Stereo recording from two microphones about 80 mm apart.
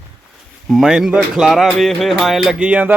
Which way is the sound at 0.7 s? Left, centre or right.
Centre.